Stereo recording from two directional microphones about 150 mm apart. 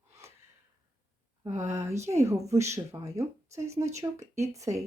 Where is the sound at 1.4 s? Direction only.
20° right (ahead or behind).